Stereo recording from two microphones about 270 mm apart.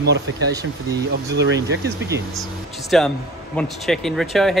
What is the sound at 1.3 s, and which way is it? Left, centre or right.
Speech, right.